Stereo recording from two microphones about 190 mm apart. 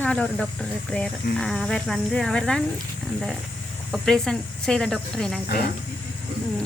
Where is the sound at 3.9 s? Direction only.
Centre (ahead or behind).